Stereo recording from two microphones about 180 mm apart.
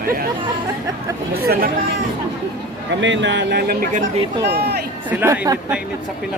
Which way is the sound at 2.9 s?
90° right.